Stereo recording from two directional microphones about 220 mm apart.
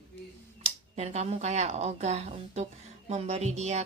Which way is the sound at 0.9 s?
30° right (ahead or behind).